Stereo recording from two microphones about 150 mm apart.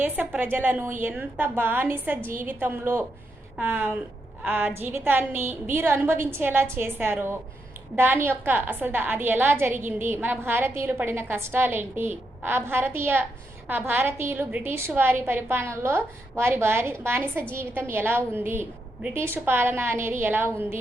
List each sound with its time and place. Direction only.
0.0 s a woman's voice: 10° right (ahead or behind)